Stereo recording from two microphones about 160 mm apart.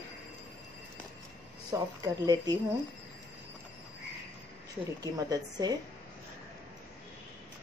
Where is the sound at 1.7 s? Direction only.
25° right (ahead or behind).